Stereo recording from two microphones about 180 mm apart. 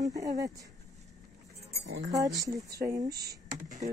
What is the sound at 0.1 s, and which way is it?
Speech, 20° right (ahead or behind).